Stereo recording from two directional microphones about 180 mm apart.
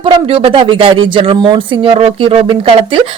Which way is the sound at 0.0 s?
30° right (ahead or behind).